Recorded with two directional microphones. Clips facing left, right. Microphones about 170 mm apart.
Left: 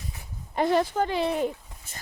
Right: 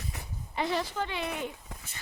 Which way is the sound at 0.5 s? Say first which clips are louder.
Left 8 dB; 50° left (ahead or behind).